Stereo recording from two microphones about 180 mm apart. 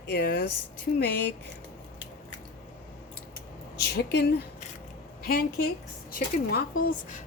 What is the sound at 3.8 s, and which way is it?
Speech, 65° left (ahead or behind).